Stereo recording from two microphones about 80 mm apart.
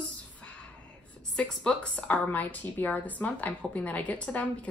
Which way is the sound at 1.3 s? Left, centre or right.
Centre.